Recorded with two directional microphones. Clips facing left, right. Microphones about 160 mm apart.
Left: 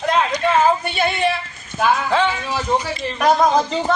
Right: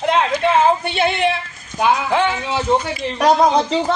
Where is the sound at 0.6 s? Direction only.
25° right (ahead or behind).